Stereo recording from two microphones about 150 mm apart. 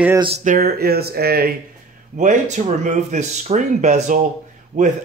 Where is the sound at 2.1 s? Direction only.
55° right (ahead or behind).